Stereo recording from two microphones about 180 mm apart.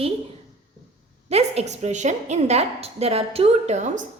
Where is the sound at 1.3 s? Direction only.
35° right (ahead or behind).